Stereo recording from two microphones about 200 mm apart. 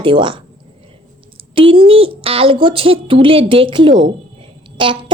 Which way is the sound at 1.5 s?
25° right (ahead or behind).